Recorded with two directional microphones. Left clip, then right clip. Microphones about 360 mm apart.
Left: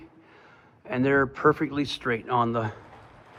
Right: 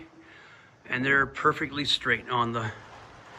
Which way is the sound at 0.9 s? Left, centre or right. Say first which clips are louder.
Left 1 dB; centre.